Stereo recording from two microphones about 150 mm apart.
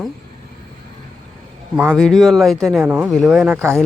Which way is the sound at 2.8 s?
10° right (ahead or behind).